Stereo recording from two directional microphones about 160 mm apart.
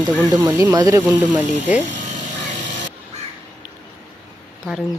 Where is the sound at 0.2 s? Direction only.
25° right (ahead or behind).